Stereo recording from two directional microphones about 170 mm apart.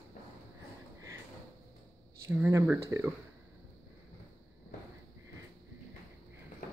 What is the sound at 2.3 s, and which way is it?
Speech, 15° right (ahead or behind).